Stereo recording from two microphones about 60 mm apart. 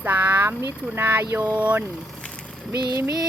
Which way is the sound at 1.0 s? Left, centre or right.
Right.